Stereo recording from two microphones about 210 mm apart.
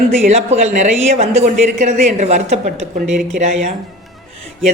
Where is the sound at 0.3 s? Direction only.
30° right (ahead or behind).